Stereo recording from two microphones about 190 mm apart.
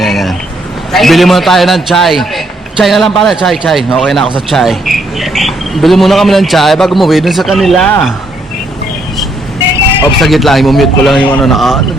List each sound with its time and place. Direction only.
0.0 s a sound: centre (ahead or behind)
0.9 s a man's voice: centre (ahead or behind)
10.2 s a man's voice: centre (ahead or behind)